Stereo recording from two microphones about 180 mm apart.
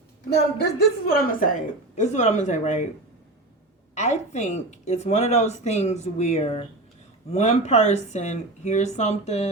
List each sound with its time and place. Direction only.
0.3 s a woman's voice: 65° left (ahead or behind)
2.0 s speech: 40° left (ahead or behind)
3.9 s speech: 40° left (ahead or behind)